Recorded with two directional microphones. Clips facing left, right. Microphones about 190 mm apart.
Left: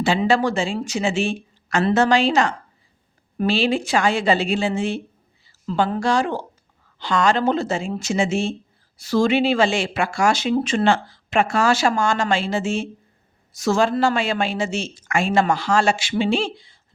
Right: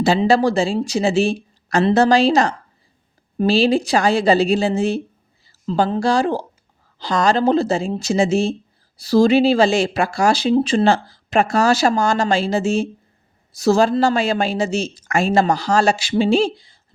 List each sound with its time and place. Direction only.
0.0 s speech: 35° right (ahead or behind)
5.5 s a sound: 40° right (ahead or behind)
5.9 s speech: 35° right (ahead or behind)